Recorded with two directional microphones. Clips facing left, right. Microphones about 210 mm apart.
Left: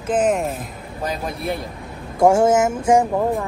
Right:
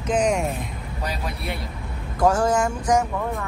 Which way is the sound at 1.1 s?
50° left (ahead or behind).